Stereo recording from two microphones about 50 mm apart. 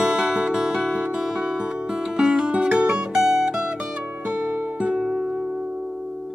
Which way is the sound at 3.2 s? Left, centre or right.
Centre.